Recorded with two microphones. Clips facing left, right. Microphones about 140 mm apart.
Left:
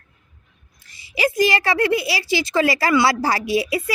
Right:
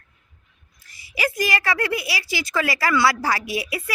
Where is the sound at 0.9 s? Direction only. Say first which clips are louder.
Left 6 dB; 25° left (ahead or behind).